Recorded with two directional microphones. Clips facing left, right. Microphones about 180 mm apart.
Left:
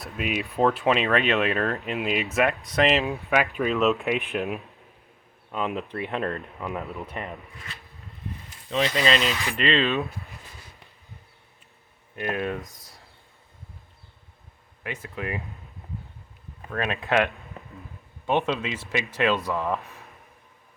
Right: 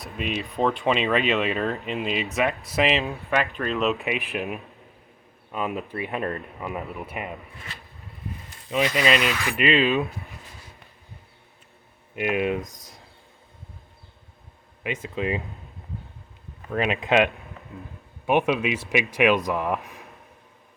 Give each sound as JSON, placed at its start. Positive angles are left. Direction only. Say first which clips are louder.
{"t": 0.0, "sound": "speech", "louder": "even", "side_deg": 5}
{"t": 8.7, "sound": "speech", "louder": "right 1 dB", "side_deg": -15}
{"t": 12.1, "sound": "speech", "louder": "right 4 dB", "side_deg": -15}
{"t": 14.8, "sound": "speech", "louder": "right 5 dB", "side_deg": -20}
{"t": 16.7, "sound": "speech", "louder": "right 3 dB", "side_deg": -15}